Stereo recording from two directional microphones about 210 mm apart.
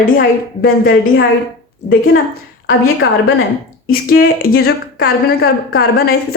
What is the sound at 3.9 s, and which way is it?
Speech, 45° left (ahead or behind).